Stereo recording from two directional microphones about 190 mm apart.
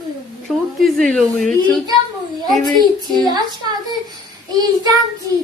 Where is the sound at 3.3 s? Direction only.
20° right (ahead or behind).